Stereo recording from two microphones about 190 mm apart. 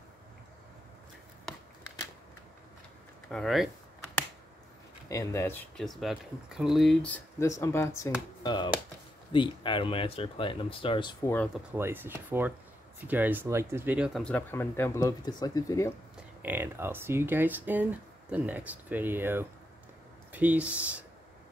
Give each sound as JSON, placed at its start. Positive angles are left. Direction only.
{"t": 3.3, "sound": "speech", "side_deg": 0}
{"t": 5.1, "sound": "speech", "side_deg": 15}
{"t": 11.7, "sound": "speech", "side_deg": -10}
{"t": 14.2, "sound": "speech", "side_deg": 10}
{"t": 16.4, "sound": "speech", "side_deg": -10}